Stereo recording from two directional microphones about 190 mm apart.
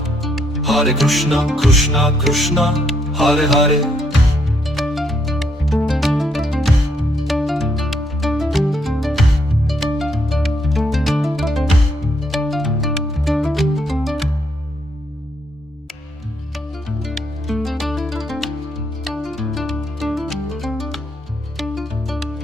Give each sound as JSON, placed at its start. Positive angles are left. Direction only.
{"t": 0.2, "sound": "music", "side_deg": 0}
{"t": 17.0, "sound": "music", "side_deg": 0}